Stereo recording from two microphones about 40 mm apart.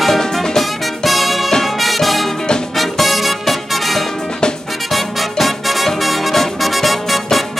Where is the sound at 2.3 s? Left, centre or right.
Centre.